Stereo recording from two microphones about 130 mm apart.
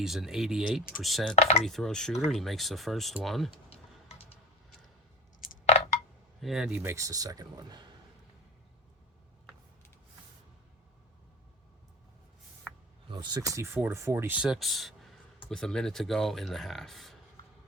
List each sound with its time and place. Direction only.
0.0 s speech: 5° right (ahead or behind)
1.4 s speech: 55° left (ahead or behind)
1.6 s speech: centre (ahead or behind)
6.4 s speech: 5° right (ahead or behind)
6.7 s speech: 20° right (ahead or behind)
13.1 s speech: 35° right (ahead or behind)
13.6 s speech: 20° right (ahead or behind)
14.3 s speech: 5° right (ahead or behind)